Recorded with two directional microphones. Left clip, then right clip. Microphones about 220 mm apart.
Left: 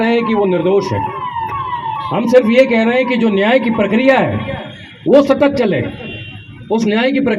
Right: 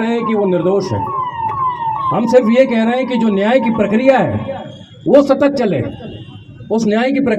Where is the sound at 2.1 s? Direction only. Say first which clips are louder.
Left 2 dB; 40° right (ahead or behind).